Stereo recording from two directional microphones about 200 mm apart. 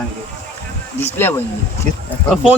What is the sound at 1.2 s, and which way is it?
Speech, 10° left (ahead or behind).